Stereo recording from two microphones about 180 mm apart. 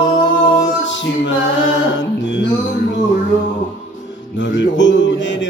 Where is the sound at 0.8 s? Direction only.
90° left.